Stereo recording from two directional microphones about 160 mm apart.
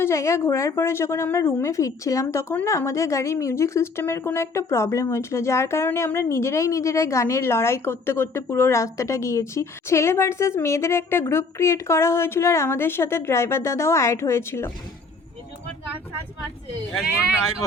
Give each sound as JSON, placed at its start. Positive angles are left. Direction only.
{"t": 0.0, "sound": "a woman's voice", "side_deg": 20}